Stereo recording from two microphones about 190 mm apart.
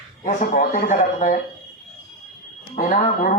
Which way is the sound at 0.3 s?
45° left (ahead or behind).